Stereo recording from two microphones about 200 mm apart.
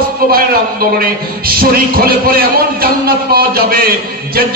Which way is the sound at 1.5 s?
45° right (ahead or behind).